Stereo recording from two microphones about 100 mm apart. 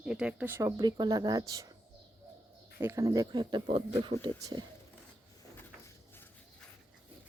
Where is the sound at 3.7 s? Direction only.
75° right (ahead or behind).